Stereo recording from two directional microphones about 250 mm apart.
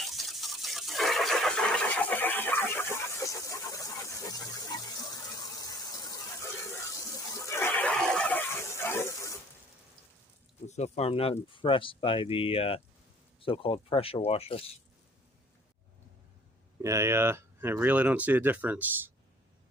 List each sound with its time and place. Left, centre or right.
0.0 s a sound: centre
10.7 s speech: left
16.8 s speech: centre